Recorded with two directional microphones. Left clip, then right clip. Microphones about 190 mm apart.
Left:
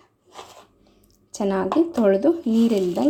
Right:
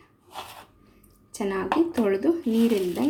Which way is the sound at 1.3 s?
35° left (ahead or behind).